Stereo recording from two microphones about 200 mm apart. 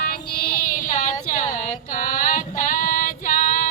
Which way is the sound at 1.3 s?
40° left (ahead or behind).